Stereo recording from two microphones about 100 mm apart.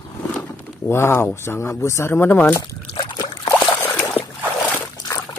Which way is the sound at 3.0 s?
45° left (ahead or behind).